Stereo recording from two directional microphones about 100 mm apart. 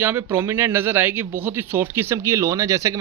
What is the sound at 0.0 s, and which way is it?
Speech, 20° right (ahead or behind).